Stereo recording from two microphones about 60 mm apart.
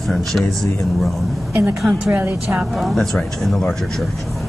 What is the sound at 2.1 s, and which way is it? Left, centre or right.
Speech, right.